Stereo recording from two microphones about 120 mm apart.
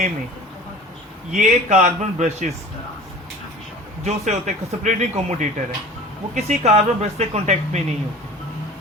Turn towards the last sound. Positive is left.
turn(degrees=-70)  # may be behind; listen again after turning